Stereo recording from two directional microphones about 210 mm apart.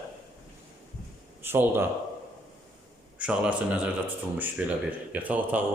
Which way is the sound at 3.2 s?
5° right (ahead or behind).